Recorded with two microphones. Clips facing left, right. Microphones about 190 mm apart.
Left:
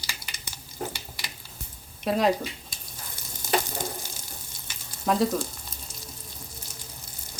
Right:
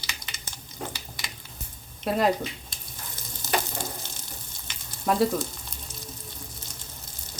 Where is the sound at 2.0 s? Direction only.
Centre (ahead or behind).